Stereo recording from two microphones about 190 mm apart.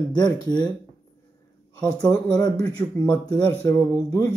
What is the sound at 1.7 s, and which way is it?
Speech, 20° left (ahead or behind).